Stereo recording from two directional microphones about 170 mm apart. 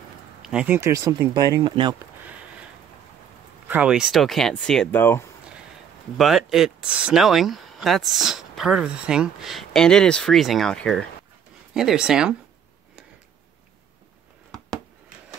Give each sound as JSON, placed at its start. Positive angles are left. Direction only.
{"t": 0.4, "sound": "speech", "side_deg": -5}
{"t": 0.7, "sound": "speech", "side_deg": -20}
{"t": 3.6, "sound": "speech", "side_deg": -10}
{"t": 6.1, "sound": "speech", "side_deg": 0}